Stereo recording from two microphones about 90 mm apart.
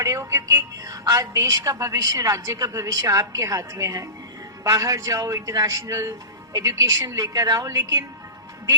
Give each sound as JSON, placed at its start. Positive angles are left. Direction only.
{"t": 0.0, "sound": "a woman's voice", "side_deg": -40}